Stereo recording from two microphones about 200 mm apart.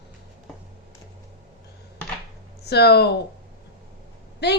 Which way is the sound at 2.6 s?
55° left (ahead or behind).